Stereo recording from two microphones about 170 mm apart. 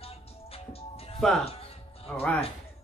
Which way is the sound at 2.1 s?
10° left (ahead or behind).